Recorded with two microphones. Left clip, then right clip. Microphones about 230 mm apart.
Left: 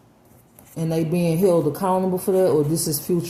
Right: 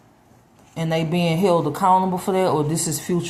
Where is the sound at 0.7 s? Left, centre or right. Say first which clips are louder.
Right 1 dB; right.